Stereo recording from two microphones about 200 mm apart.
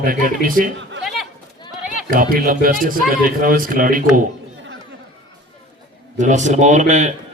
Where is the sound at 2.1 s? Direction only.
45° right (ahead or behind).